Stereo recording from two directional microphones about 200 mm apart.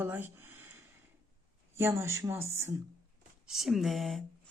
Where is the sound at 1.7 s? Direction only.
15° right (ahead or behind).